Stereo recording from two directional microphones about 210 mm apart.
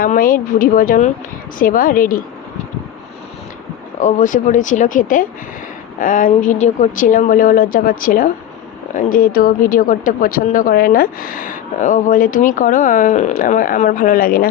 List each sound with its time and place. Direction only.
0.0 s speech: 40° left (ahead or behind)
4.0 s speech: 35° left (ahead or behind)